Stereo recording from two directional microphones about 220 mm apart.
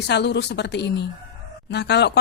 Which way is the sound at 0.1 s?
50° left (ahead or behind).